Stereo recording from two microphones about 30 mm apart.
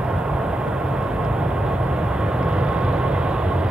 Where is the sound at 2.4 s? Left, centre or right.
Right.